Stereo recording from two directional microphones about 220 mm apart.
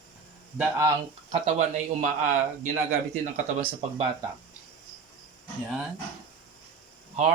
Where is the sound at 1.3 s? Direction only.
35° right (ahead or behind).